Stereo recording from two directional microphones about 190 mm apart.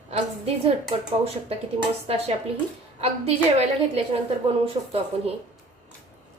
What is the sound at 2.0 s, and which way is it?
A woman's voice, 30° right (ahead or behind).